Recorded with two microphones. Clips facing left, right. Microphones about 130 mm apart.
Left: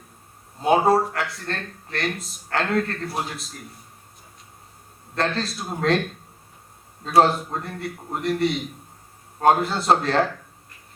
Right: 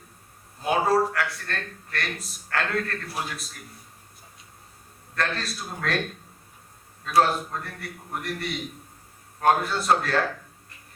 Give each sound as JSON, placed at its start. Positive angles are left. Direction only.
{"t": 0.6, "sound": "speech", "side_deg": 25}
{"t": 5.1, "sound": "speech", "side_deg": 25}
{"t": 7.0, "sound": "speech", "side_deg": 25}